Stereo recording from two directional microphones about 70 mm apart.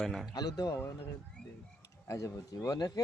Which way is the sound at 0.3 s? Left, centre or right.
Left.